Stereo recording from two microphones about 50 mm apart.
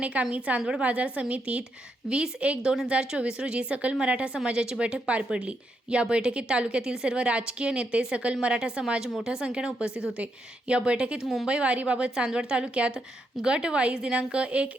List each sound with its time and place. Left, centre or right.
0.0 s a woman's voice: right
0.9 s a woman's voice: right